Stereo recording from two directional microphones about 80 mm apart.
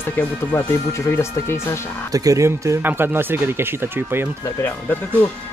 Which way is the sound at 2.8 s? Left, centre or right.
Right.